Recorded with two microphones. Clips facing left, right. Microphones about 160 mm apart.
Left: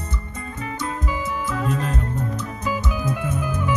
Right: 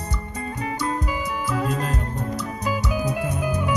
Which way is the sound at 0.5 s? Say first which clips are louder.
Right 2 dB; 35° right (ahead or behind).